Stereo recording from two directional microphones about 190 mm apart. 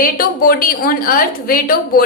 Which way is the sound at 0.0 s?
50° left (ahead or behind).